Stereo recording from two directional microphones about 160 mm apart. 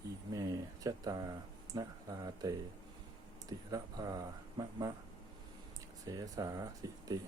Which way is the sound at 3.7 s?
25° right (ahead or behind).